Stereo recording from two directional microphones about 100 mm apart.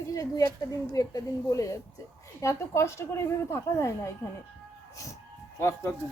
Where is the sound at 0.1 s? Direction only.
35° left (ahead or behind).